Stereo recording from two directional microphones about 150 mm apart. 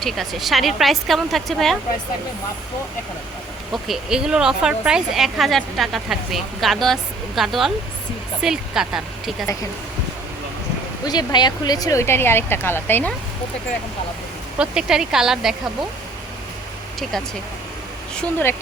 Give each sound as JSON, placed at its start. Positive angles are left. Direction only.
{"t": 0.0, "sound": "speech", "side_deg": 0}
{"t": 3.7, "sound": "speech", "side_deg": 0}
{"t": 11.0, "sound": "speech", "side_deg": 25}
{"t": 14.6, "sound": "speech", "side_deg": -5}
{"t": 17.0, "sound": "speech", "side_deg": 5}